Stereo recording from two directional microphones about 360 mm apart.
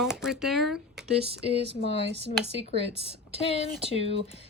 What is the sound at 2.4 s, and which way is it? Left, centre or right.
Speech, centre.